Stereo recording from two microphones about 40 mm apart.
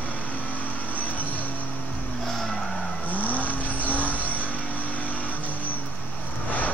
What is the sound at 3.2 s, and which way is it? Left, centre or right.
Vehicle, left.